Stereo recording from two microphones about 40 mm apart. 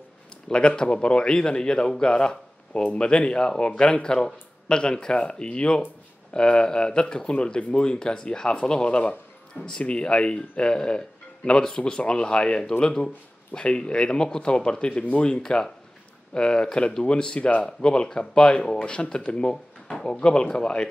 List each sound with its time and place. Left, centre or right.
0.5 s speech: left
2.8 s speech: left
3.1 s speech: left
15.4 s speech: centre
19.5 s drawer open or close: centre
20.1 s speech: left